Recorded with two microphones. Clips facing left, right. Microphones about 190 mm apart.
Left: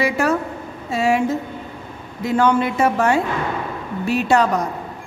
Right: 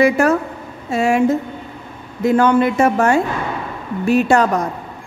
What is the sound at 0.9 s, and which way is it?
Speech, 50° right (ahead or behind).